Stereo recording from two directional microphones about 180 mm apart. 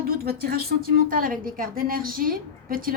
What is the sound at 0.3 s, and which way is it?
A woman's voice, 60° right (ahead or behind).